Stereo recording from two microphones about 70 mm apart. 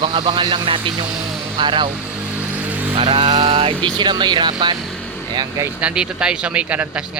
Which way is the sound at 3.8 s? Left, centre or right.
Right.